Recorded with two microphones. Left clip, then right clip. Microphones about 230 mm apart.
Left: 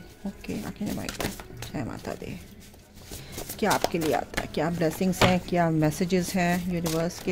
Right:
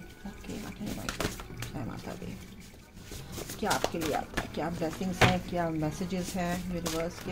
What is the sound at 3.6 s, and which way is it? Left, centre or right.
A woman's voice, left.